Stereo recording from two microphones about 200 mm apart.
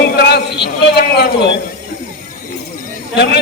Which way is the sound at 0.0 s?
55° left (ahead or behind).